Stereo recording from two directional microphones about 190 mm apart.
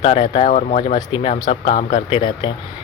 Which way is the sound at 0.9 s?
25° left (ahead or behind).